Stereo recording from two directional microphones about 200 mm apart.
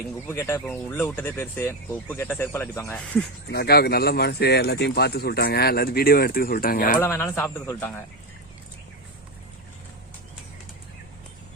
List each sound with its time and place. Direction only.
0.3 s speech: 10° left (ahead or behind)
3.5 s speech: 55° left (ahead or behind)
7.0 s speech: 10° left (ahead or behind)